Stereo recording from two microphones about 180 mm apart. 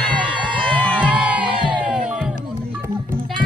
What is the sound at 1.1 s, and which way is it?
Music, 5° right (ahead or behind).